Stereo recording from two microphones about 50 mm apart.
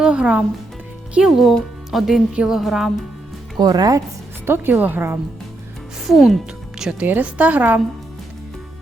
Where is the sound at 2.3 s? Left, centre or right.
Centre.